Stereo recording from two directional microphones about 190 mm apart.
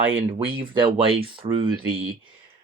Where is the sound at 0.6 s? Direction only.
25° right (ahead or behind).